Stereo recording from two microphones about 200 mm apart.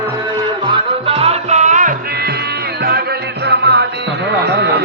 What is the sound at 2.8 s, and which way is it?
Music, 50° right (ahead or behind).